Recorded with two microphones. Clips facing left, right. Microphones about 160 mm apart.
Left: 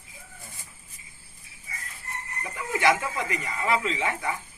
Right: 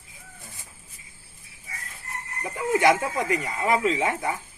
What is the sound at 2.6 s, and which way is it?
Speech, 45° right (ahead or behind).